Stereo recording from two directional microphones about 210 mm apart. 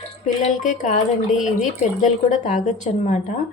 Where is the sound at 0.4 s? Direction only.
35° left (ahead or behind).